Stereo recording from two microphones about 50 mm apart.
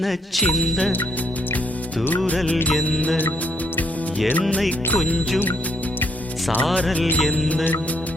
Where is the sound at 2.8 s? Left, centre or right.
Left.